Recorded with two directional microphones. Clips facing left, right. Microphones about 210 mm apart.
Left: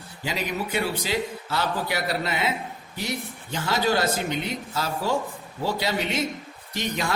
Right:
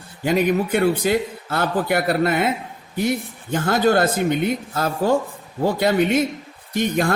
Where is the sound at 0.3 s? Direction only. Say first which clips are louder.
Right 11 dB; 55° right (ahead or behind).